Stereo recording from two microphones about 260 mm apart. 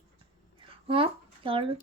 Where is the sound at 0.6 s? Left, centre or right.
Right.